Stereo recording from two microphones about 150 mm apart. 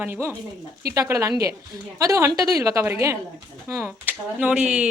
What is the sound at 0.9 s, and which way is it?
A woman's voice, 20° right (ahead or behind).